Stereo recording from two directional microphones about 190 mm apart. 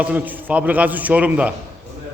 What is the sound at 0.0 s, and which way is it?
A man's voice, 10° right (ahead or behind).